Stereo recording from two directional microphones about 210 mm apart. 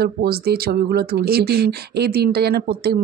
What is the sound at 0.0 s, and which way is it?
Speech, 50° right (ahead or behind).